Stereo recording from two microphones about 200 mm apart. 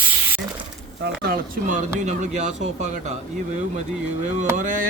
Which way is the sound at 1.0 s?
50° right (ahead or behind).